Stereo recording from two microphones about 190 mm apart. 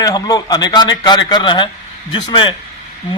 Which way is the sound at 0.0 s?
20° left (ahead or behind).